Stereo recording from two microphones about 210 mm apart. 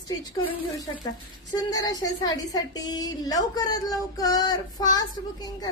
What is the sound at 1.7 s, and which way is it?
A woman's voice, 20° left (ahead or behind).